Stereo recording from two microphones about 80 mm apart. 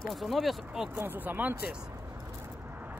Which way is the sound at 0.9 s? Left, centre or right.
Right.